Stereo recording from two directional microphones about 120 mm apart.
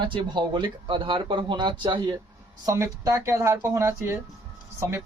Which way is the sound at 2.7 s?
25° right (ahead or behind).